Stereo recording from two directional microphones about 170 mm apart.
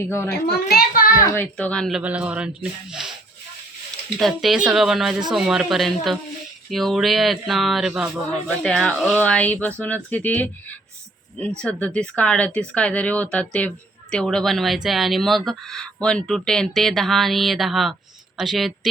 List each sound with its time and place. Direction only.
0.0 s speech: 15° left (ahead or behind)
0.4 s a child's voice: 65° left (ahead or behind)
1.3 s speech: 10° left (ahead or behind)
2.0 s speech: 5° right (ahead or behind)
4.2 s a woman's voice: centre (ahead or behind)